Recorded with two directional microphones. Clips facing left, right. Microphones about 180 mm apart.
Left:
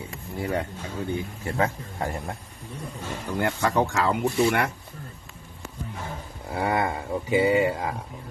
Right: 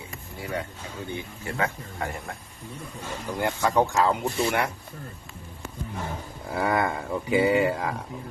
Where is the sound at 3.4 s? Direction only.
70° left (ahead or behind).